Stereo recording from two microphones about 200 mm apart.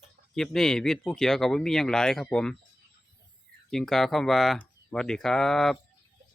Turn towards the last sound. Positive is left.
turn(degrees=0)  # may be behind; listen again after turning